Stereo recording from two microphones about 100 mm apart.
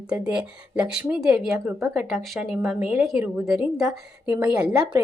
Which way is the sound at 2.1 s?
Centre (ahead or behind).